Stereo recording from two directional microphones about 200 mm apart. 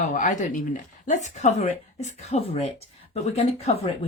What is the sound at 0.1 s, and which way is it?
Speech, 40° left (ahead or behind).